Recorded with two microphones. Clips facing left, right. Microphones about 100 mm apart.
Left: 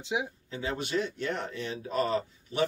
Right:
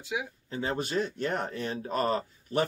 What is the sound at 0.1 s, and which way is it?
Speech, 20° left (ahead or behind).